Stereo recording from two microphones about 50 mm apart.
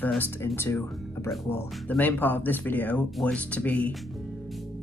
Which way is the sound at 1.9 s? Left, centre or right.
Left.